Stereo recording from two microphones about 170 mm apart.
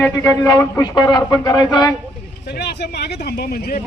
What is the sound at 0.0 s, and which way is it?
Speech, 15° left (ahead or behind).